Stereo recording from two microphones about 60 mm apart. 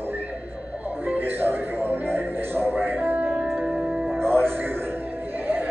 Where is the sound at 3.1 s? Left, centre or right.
Right.